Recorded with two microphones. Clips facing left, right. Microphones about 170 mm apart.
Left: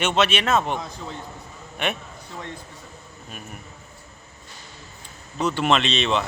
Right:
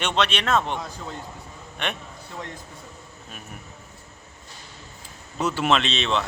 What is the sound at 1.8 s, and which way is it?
Speech, 5° left (ahead or behind).